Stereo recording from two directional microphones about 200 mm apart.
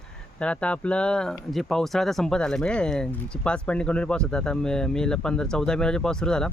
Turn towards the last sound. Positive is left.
turn(degrees=5)  # may be behind; listen again after turning